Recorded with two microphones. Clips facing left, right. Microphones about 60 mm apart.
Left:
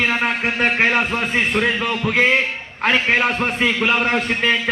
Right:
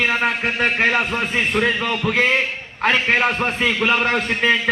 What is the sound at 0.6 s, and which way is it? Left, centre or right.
A man's voice, left.